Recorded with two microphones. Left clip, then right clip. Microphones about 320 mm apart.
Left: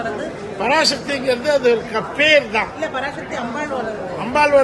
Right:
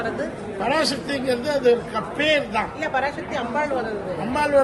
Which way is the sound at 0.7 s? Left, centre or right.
Centre.